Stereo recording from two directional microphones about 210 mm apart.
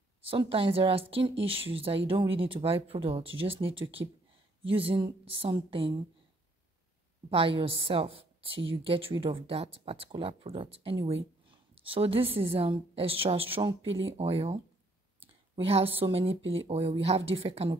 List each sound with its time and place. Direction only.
0.3 s speech: 25° right (ahead or behind)
7.2 s speech: 25° right (ahead or behind)
13.8 s speech: 65° right (ahead or behind)
14.1 s speech: 30° right (ahead or behind)
15.1 s a sound: 25° right (ahead or behind)
16.0 s speech: 25° right (ahead or behind)